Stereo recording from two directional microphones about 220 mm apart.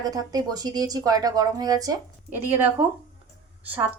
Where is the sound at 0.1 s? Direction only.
15° right (ahead or behind).